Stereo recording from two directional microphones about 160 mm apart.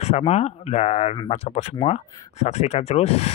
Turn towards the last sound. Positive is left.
turn(degrees=40)  # may be behind; listen again after turning